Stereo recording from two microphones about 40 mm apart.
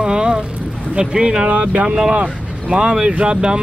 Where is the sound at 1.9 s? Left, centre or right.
Centre.